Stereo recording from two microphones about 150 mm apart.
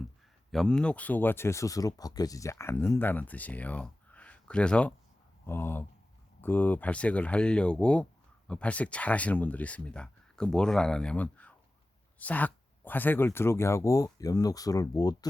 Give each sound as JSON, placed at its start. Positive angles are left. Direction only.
{"t": 0.5, "sound": "speech", "side_deg": 5}